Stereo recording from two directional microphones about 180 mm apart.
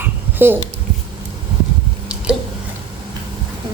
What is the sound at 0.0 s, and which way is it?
Babbling, 10° right (ahead or behind).